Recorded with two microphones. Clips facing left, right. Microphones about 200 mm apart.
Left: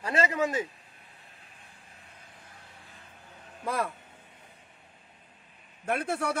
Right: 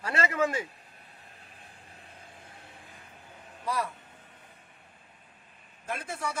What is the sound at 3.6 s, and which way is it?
Speech, 55° left (ahead or behind).